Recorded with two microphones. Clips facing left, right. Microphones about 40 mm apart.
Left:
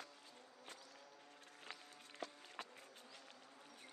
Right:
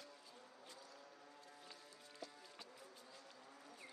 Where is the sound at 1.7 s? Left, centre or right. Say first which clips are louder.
Left 3 dB; left.